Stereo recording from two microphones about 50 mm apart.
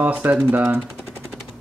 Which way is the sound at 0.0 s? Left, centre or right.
Right.